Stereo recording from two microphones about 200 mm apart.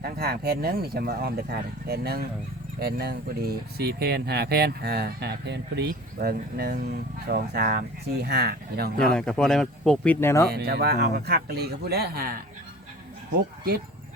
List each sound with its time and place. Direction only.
0.0 s speech: 50° right (ahead or behind)
9.0 s speech: 5° left (ahead or behind)
10.5 s speech: 50° right (ahead or behind)